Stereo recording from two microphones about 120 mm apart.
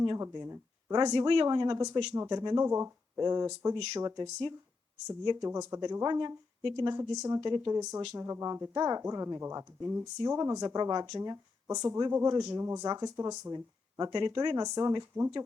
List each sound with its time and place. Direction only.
0.1 s speech: 25° right (ahead or behind)
0.9 s speech: 35° right (ahead or behind)
2.6 s speech: 20° right (ahead or behind)
5.4 s speech: 25° right (ahead or behind); by 6.7 s 45° right (ahead or behind)
6.7 s speech: 25° right (ahead or behind)
13.5 s speech: 30° right (ahead or behind)